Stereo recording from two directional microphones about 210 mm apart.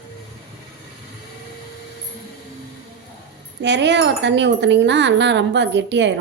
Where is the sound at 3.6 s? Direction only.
55° right (ahead or behind).